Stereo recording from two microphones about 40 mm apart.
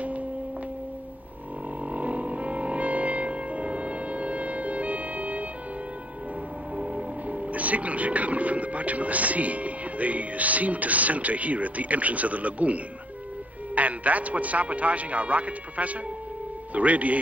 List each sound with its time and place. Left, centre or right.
1.8 s music: right
6.7 s speech: right